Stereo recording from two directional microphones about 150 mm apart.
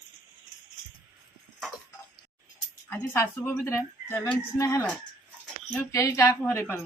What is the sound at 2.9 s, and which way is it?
A woman's voice, 15° left (ahead or behind).